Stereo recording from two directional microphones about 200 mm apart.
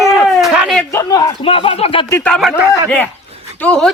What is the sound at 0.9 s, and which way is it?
Speech, 15° left (ahead or behind).